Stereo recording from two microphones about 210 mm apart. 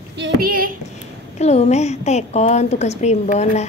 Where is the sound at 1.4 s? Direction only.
30° left (ahead or behind).